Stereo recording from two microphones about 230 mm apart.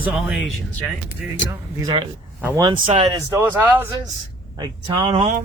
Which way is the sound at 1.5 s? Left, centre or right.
Centre.